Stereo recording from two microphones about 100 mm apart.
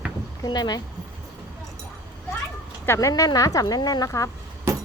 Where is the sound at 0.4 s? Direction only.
45° left (ahead or behind).